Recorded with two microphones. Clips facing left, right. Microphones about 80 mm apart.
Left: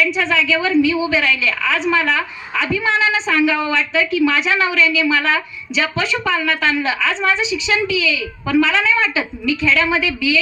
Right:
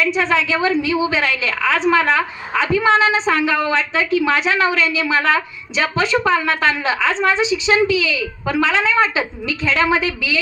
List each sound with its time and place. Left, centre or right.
0.0 s a woman's voice: right